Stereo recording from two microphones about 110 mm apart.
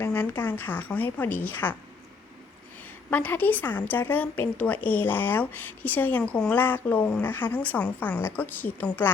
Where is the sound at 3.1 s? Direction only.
15° left (ahead or behind).